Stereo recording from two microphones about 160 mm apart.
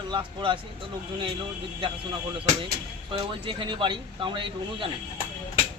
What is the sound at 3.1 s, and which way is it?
Speech, 30° right (ahead or behind).